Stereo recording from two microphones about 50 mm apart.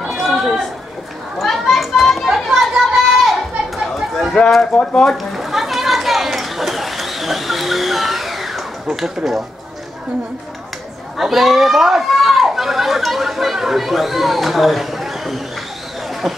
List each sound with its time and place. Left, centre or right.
0.0 s chatter: centre
1.4 s a sound: centre
2.2 s children playing: centre
4.4 s speech: left
5.1 s a sound: centre
11.1 s speech: centre